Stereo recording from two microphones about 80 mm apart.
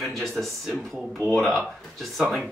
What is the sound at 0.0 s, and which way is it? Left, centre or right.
Speech, centre.